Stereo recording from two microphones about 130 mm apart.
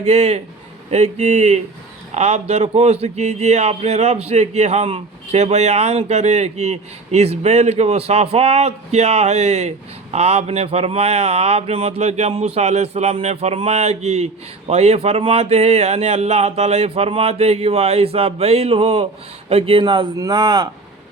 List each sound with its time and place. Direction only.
0.0 s speech: 55° right (ahead or behind); by 20.1 s 40° right (ahead or behind)
20.1 s speech: 30° right (ahead or behind)